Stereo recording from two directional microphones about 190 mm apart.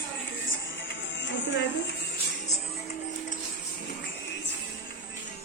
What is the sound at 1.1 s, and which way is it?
Music, 70° left (ahead or behind).